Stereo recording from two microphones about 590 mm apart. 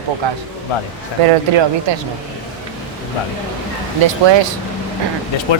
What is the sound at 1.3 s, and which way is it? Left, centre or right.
Speech, right.